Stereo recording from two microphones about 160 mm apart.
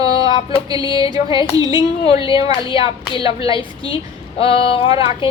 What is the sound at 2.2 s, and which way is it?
A woman's voice, 35° left (ahead or behind).